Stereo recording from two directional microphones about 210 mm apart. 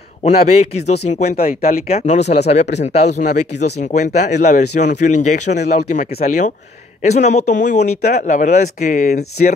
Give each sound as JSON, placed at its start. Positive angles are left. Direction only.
{"t": 0.2, "sound": "speech", "side_deg": 30}